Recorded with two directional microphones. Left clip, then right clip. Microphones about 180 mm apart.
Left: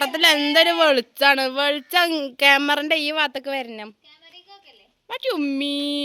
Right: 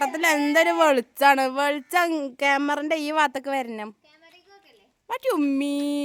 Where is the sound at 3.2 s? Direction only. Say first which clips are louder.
Even; 25° right (ahead or behind).